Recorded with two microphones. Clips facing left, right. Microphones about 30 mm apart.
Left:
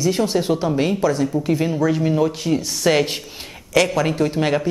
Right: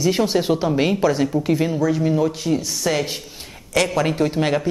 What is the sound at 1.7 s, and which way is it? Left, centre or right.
Speech, centre.